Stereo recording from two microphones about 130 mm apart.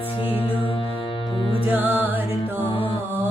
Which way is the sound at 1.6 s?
15° right (ahead or behind).